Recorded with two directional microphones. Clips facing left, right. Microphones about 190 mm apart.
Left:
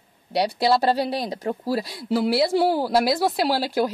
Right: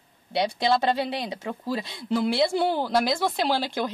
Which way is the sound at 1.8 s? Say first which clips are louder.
Left 2 dB; 5° left (ahead or behind).